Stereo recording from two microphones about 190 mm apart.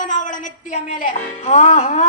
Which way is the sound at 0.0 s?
45° left (ahead or behind).